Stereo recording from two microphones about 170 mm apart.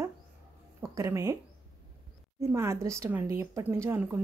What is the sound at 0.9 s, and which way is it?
Speech, 20° right (ahead or behind).